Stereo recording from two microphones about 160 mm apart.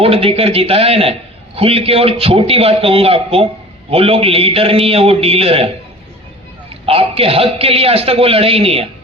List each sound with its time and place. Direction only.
0.0 s a man's voice: 35° right (ahead or behind)